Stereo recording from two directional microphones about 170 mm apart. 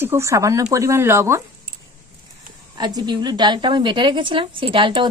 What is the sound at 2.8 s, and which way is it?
A woman's voice, 25° right (ahead or behind).